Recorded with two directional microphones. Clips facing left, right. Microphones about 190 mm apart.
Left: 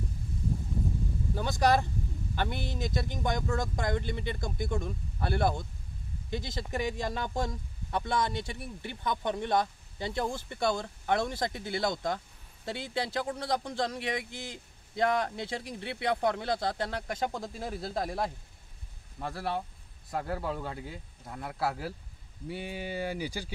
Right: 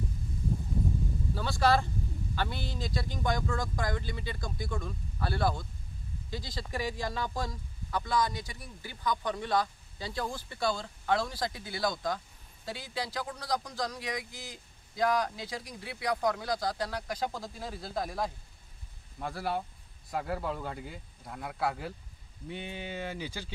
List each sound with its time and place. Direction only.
1.3 s speech: 20° left (ahead or behind)
19.1 s speech: centre (ahead or behind)